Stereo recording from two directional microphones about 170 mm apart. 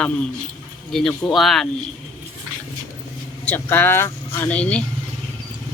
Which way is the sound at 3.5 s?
10° left (ahead or behind).